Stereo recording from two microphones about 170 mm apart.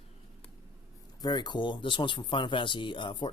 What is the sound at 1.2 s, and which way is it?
A man's voice, 25° left (ahead or behind).